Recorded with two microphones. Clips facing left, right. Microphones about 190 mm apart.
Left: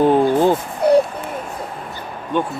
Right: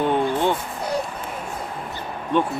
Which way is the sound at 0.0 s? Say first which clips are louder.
Left 7 dB; 35° left (ahead or behind).